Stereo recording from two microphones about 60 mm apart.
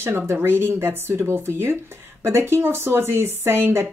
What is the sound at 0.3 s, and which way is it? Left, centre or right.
A woman's voice, right.